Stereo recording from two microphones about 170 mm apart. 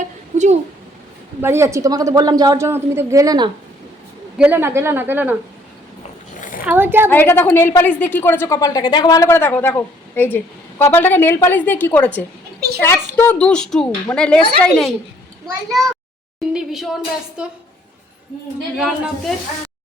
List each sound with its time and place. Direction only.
0.0 s a sound: 45° right (ahead or behind)
1.4 s a woman's voice: 15° right (ahead or behind)
4.4 s a woman's voice: 10° right (ahead or behind)
6.7 s a woman's voice: 10° right (ahead or behind)
7.1 s a woman's voice: 10° left (ahead or behind)
16.5 s a child's voice: centre (ahead or behind)
18.8 s a child's voice: centre (ahead or behind)